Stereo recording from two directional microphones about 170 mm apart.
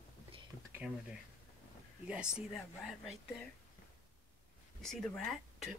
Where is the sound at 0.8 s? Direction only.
5° right (ahead or behind).